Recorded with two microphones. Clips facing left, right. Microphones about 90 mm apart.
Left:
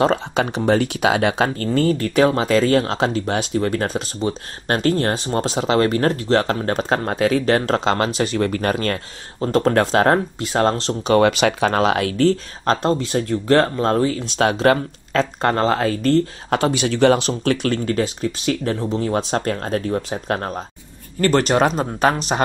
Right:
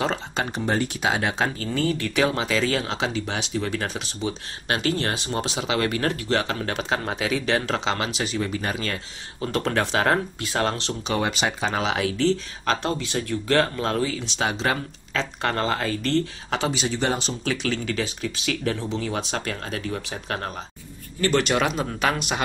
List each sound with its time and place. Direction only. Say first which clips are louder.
0.0 s speech: left 8 dB; 60° left (ahead or behind)
1.7 s speech: left 6 dB; 40° left (ahead or behind)
9.4 s speech: left 7 dB; 35° left (ahead or behind)
11.1 s speech: left 10 dB; 60° left (ahead or behind)
15.4 s speech: left 6 dB; 40° left (ahead or behind); by 17.3 s 70° left (ahead or behind)
17.3 s speech: left 7 dB; 55° left (ahead or behind); by 22.4 s 35° left (ahead or behind)